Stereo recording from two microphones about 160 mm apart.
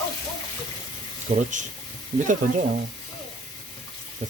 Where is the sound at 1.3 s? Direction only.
45° right (ahead or behind).